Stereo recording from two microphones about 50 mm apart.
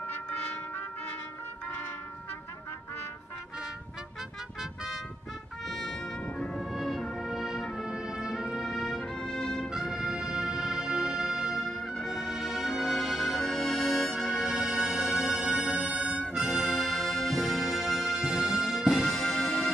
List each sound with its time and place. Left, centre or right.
4.6 s vehicle: centre
5.7 s brass instrument: centre
6.2 s brass instrument: centre
6.6 s music: centre
9.0 s music: centre
9.8 s music: centre
16.0 s music: right
16.3 s brass instrument: centre
19.1 s music: centre